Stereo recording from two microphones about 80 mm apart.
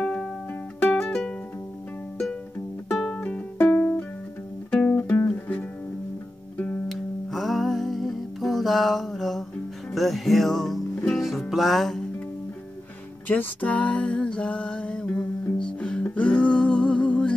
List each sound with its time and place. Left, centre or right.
0.0 s music: centre
2.9 s music: centre
3.2 s music: left
6.9 s music: centre
13.3 s music: centre